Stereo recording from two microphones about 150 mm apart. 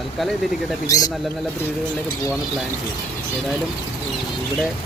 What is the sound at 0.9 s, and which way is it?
Speech, 25° left (ahead or behind).